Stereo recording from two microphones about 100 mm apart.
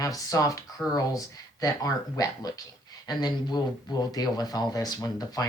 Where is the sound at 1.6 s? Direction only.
35° left (ahead or behind).